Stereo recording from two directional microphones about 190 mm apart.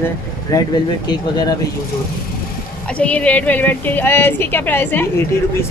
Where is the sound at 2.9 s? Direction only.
5° left (ahead or behind).